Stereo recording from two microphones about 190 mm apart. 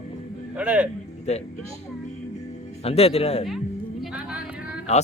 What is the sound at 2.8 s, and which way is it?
Speech, 30° left (ahead or behind).